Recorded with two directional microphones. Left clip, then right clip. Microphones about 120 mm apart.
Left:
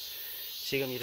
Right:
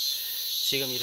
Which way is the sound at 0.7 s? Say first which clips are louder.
Right 1 dB; centre (ahead or behind).